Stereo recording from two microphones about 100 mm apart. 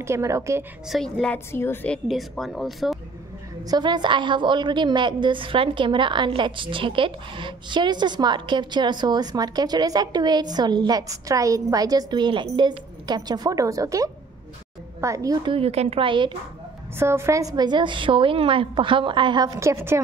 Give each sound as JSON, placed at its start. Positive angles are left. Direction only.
{"t": 0.0, "sound": "a woman's voice", "side_deg": -30}
{"t": 0.8, "sound": "speech", "side_deg": 0}
{"t": 1.5, "sound": "a woman's voice", "side_deg": 25}
{"t": 2.0, "sound": "speech", "side_deg": 0}
{"t": 3.6, "sound": "a woman's voice", "side_deg": -45}
{"t": 15.4, "sound": "a woman's voice", "side_deg": -75}
{"t": 17.0, "sound": "a woman's voice", "side_deg": -25}
{"t": 19.6, "sound": "a woman's voice", "side_deg": -25}